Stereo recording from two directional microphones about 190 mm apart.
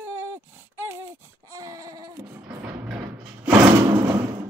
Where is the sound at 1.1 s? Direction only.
15° right (ahead or behind).